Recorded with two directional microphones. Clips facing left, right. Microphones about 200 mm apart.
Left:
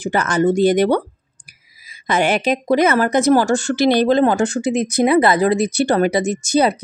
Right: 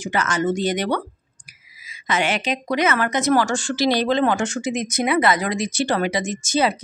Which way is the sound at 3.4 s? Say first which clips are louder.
Left 5 dB; 60° left (ahead or behind).